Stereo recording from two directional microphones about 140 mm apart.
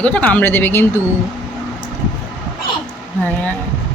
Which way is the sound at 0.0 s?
10° left (ahead or behind).